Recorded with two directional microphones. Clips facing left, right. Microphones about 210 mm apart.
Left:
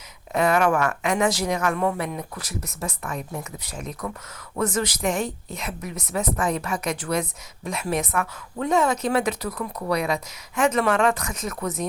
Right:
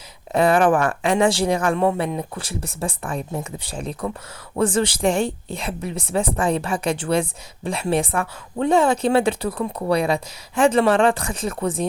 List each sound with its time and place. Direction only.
0.3 s a woman's voice: 30° right (ahead or behind)